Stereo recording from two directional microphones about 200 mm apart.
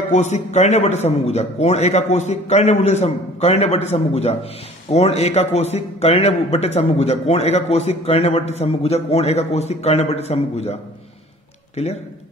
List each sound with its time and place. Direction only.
0.1 s a man's voice: 35° left (ahead or behind)